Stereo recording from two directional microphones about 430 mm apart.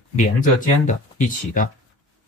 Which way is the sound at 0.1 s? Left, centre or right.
Centre.